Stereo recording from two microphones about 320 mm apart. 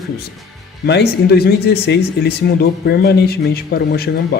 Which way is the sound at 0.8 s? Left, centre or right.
Left.